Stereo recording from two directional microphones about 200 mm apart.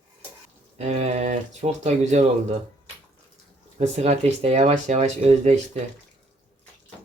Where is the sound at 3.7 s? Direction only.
35° right (ahead or behind).